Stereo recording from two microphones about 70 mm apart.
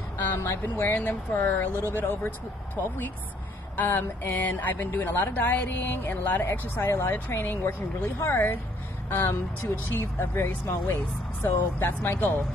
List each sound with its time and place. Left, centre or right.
0.3 s speech: left
0.9 s speech: left